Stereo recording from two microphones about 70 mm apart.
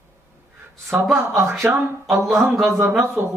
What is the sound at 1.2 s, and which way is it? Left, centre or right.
Speech, right.